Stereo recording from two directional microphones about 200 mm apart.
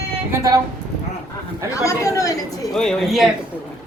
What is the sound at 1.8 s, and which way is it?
Speech, 15° left (ahead or behind).